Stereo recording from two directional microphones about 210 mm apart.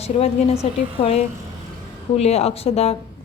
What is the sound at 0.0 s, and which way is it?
A woman's voice, 30° left (ahead or behind).